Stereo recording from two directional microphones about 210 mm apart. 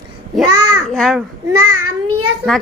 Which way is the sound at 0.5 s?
90° right.